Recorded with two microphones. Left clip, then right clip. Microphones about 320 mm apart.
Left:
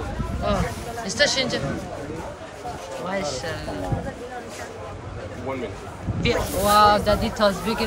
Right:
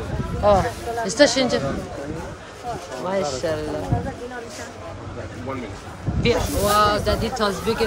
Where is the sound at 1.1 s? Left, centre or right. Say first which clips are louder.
Right 4 dB; centre.